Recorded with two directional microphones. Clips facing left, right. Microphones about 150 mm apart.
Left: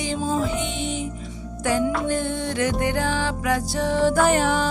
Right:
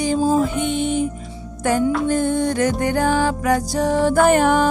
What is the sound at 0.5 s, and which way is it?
Music, 50° right (ahead or behind).